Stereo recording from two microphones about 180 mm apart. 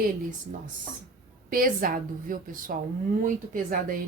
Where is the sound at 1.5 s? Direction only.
55° right (ahead or behind).